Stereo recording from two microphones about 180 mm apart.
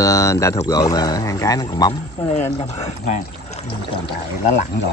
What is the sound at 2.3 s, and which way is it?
Speech, 40° left (ahead or behind).